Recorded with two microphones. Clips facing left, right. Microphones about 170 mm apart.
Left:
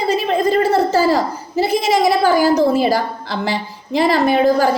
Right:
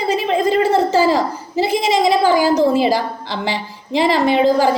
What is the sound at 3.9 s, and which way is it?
Speech, 15° right (ahead or behind).